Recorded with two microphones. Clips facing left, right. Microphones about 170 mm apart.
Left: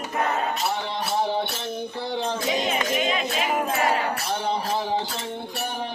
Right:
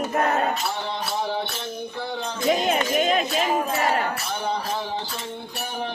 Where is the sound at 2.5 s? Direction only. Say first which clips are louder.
Right 6 dB; 50° right (ahead or behind).